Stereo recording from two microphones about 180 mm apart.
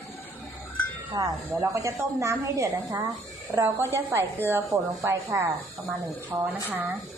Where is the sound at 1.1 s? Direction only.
20° right (ahead or behind).